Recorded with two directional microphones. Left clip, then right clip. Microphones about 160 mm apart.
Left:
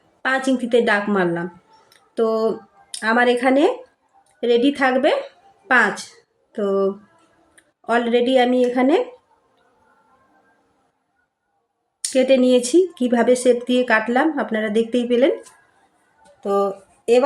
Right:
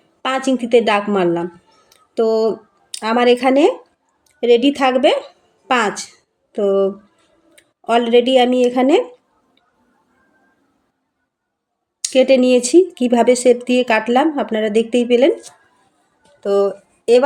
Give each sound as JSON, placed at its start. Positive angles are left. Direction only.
{"t": 0.2, "sound": "a woman's voice", "side_deg": -15}
{"t": 12.1, "sound": "speech", "side_deg": -20}
{"t": 16.4, "sound": "speech", "side_deg": -20}